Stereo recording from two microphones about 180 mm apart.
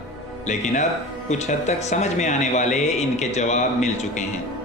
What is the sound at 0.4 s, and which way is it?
Speech, 40° left (ahead or behind).